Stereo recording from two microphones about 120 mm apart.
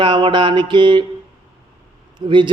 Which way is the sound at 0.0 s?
40° right (ahead or behind).